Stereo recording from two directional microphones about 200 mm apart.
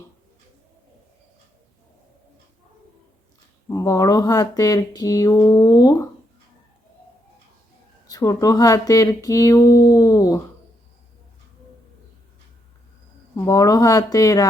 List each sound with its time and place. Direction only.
3.7 s speech: 15° left (ahead or behind)
8.0 s speech: 20° left (ahead or behind)
13.3 s speech: 15° left (ahead or behind)